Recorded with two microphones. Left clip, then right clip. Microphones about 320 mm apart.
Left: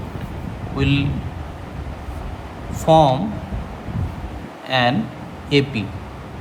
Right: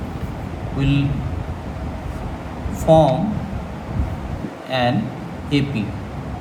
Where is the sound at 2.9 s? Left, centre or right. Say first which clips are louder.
Even; left.